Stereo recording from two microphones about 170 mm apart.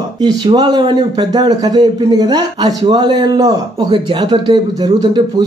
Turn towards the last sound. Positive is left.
turn(degrees=-25)  # may be behind; listen again after turning